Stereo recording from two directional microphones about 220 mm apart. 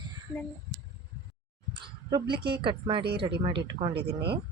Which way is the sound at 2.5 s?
20° right (ahead or behind).